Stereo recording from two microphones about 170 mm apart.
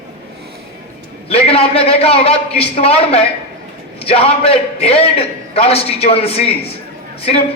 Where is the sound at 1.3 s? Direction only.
35° left (ahead or behind).